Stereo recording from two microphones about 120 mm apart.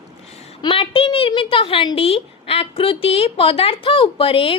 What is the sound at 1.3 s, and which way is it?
A woman's voice, 45° left (ahead or behind).